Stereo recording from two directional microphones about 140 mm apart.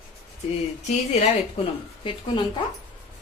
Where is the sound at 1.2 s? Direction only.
40° left (ahead or behind).